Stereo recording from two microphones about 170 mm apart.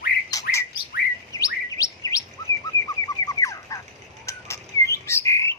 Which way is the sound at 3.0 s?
20° left (ahead or behind).